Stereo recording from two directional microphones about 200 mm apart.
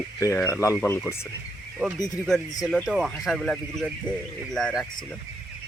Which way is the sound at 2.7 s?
Centre (ahead or behind).